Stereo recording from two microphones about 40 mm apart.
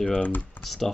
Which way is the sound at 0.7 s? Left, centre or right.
Centre.